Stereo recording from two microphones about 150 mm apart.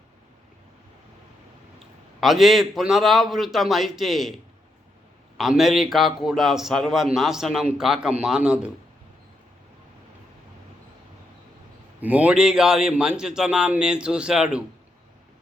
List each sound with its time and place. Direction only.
2.2 s a man's voice: centre (ahead or behind)
5.4 s a man's voice: centre (ahead or behind)
12.0 s a man's voice: 10° right (ahead or behind)